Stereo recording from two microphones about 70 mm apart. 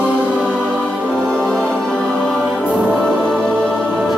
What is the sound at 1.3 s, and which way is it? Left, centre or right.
Music, centre.